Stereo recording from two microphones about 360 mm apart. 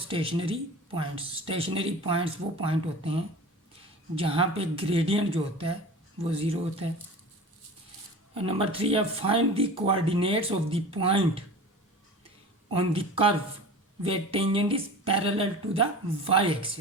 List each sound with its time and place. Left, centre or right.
0.1 s speech: centre
8.4 s speech: centre
12.7 s speech: centre